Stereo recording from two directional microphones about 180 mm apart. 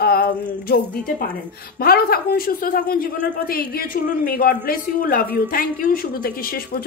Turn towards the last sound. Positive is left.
turn(degrees=55)  # may be behind; listen again after turning